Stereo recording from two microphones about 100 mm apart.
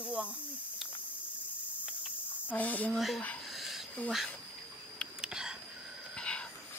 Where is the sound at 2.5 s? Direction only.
15° left (ahead or behind).